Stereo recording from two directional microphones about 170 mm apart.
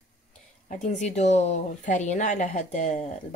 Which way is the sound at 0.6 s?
45° left (ahead or behind).